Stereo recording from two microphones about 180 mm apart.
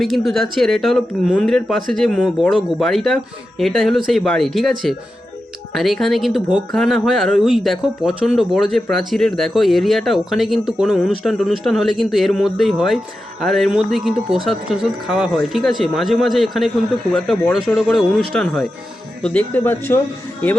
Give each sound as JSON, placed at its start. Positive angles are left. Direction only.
{"t": 0.0, "sound": "speech", "side_deg": 0}
{"t": 5.7, "sound": "speech", "side_deg": 0}